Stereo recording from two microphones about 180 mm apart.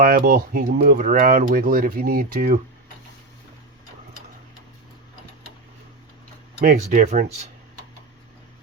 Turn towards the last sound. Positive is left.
turn(degrees=-40)  # may be behind; listen again after turning